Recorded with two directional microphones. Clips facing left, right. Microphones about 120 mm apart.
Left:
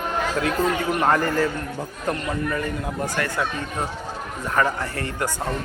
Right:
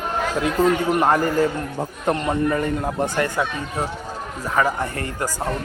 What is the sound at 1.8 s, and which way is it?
A man's voice, 30° right (ahead or behind).